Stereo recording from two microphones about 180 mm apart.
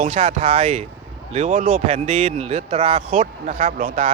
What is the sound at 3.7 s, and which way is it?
Speech, 50° right (ahead or behind).